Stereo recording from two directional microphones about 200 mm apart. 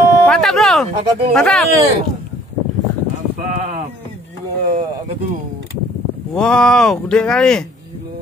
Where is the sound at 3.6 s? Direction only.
45° right (ahead or behind).